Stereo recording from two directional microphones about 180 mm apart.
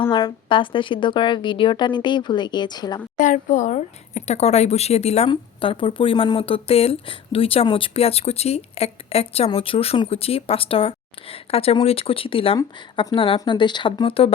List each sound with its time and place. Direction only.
0.0 s a woman's voice: 30° left (ahead or behind)
3.2 s a woman's voice: 45° left (ahead or behind)